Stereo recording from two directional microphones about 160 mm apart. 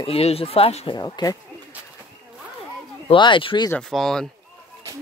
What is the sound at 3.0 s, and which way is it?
Speech, 30° left (ahead or behind).